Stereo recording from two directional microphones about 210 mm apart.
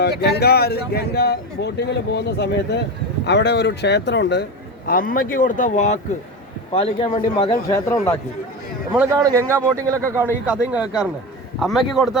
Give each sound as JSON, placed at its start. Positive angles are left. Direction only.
{"t": 0.0, "sound": "speech", "side_deg": 50}
{"t": 4.9, "sound": "a man's voice", "side_deg": 45}
{"t": 8.9, "sound": "a man's voice", "side_deg": -15}